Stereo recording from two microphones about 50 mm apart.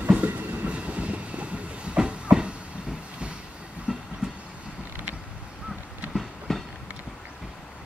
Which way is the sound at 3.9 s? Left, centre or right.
Centre.